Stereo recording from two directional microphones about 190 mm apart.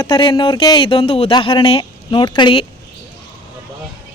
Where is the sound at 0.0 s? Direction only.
25° left (ahead or behind).